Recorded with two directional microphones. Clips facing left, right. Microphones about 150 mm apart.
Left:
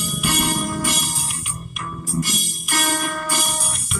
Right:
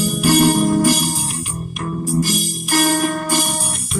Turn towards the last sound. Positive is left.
turn(degrees=-30)  # may be behind; listen again after turning